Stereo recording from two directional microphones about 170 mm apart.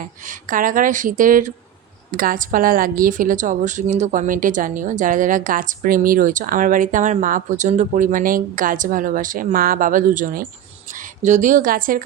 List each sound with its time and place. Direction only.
0.0 s a woman's voice: 50° right (ahead or behind)